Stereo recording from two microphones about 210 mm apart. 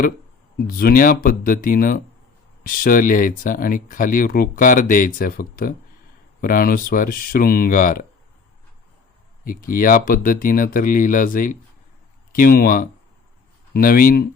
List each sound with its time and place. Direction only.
0.5 s speech: 45° left (ahead or behind)
9.4 s speech: 40° left (ahead or behind)